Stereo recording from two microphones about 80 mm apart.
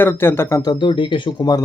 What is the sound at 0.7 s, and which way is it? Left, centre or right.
Speech, left.